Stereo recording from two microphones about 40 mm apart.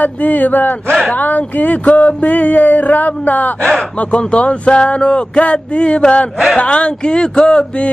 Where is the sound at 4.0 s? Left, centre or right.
Left.